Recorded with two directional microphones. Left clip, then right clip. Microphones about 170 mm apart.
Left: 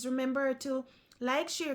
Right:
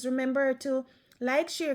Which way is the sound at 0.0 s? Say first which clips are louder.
Right 4 dB; 15° right (ahead or behind).